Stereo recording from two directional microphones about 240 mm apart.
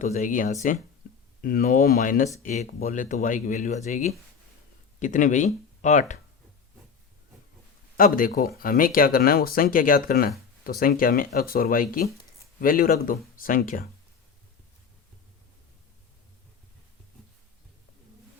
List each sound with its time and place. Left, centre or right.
0.0 s speech: left
7.9 s speech: left